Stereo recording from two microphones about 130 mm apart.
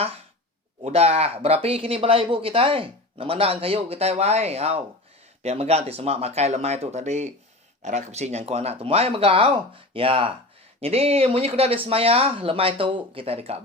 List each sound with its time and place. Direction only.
0.9 s speech: 55° right (ahead or behind)